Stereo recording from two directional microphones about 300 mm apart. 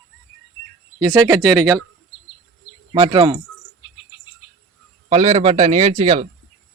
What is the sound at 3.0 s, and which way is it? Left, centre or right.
Speech, centre.